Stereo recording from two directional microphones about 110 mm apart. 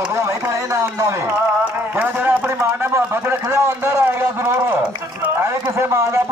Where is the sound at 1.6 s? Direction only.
15° right (ahead or behind).